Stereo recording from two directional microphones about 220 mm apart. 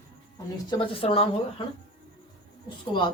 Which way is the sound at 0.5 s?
20° left (ahead or behind).